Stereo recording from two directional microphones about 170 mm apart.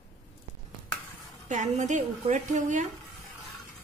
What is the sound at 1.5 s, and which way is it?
A woman's voice, 45° right (ahead or behind).